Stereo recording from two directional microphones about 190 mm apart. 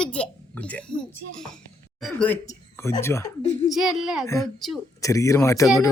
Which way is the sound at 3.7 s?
Centre (ahead or behind).